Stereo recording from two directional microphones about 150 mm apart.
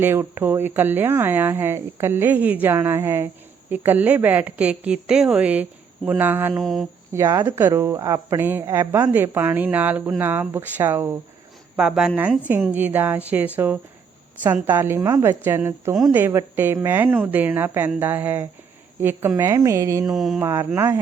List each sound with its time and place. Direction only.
0.0 s speech: 15° right (ahead or behind)
6.6 s a woman's voice: centre (ahead or behind)
7.1 s speech: 25° right (ahead or behind)
11.8 s a woman's voice: 5° right (ahead or behind); by 20.1 s 20° right (ahead or behind)
20.1 s a woman's voice: centre (ahead or behind)
20.4 s speech: 15° right (ahead or behind)